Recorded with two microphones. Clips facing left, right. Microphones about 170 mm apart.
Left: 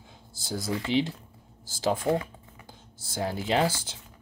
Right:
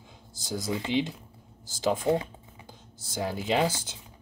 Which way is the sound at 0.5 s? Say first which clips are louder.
Left 1 dB; 20° right (ahead or behind).